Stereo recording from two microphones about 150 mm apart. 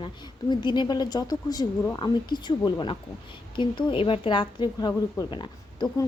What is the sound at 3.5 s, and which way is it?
A woman's voice, 35° left (ahead or behind).